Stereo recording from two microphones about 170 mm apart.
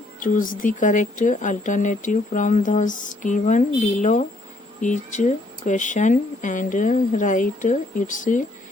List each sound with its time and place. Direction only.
0.2 s speech: 55° left (ahead or behind)